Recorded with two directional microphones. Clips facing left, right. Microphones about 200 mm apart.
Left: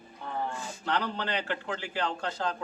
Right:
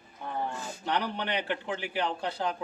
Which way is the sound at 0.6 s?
15° right (ahead or behind).